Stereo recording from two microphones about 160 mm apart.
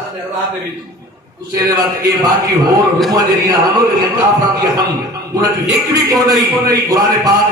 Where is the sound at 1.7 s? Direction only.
25° right (ahead or behind).